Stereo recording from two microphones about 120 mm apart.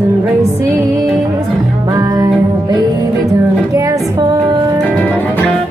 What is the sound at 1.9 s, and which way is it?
Music, 30° right (ahead or behind).